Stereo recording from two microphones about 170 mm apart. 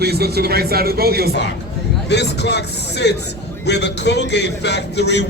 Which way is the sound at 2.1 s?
90° left.